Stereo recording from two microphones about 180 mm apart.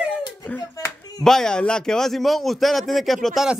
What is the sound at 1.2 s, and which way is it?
A man's voice, 5° left (ahead or behind).